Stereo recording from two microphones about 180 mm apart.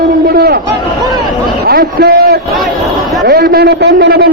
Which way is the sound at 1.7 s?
60° right (ahead or behind).